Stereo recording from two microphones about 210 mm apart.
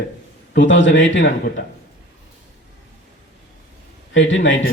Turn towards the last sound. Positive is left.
turn(degrees=60)  # may be behind; listen again after turning